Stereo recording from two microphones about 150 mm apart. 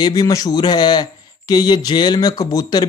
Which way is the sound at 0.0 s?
25° left (ahead or behind).